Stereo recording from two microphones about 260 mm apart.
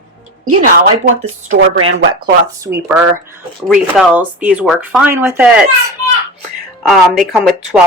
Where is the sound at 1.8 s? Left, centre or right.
Right.